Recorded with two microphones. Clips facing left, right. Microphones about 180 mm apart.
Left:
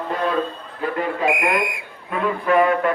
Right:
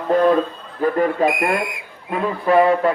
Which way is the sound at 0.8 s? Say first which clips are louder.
Right 5 dB; 40° right (ahead or behind).